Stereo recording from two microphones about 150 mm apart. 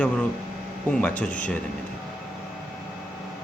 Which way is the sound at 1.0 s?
10° left (ahead or behind).